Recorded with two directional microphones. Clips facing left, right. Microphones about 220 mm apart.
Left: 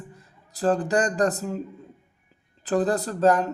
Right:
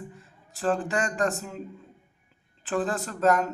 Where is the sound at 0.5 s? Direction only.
40° left (ahead or behind).